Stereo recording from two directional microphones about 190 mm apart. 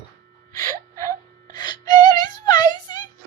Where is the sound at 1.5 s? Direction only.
20° left (ahead or behind).